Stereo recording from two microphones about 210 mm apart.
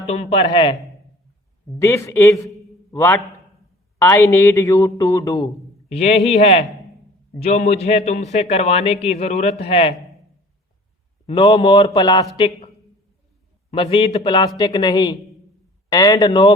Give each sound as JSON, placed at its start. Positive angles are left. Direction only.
{"t": 0.1, "sound": "a man's voice", "side_deg": 30}
{"t": 1.8, "sound": "a man's voice", "side_deg": 15}
{"t": 5.9, "sound": "a man's voice", "side_deg": 30}
{"t": 11.3, "sound": "a man's voice", "side_deg": 25}
{"t": 13.7, "sound": "a man's voice", "side_deg": 30}